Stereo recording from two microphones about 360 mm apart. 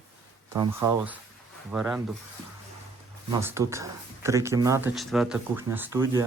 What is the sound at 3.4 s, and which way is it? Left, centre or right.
Speech, centre.